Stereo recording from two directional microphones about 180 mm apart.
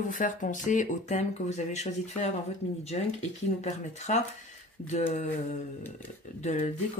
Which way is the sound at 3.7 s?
40° left (ahead or behind).